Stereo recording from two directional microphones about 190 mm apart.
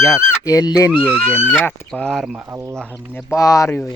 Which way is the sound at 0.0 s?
15° left (ahead or behind).